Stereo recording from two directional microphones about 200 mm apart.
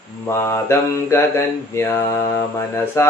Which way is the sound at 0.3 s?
15° left (ahead or behind).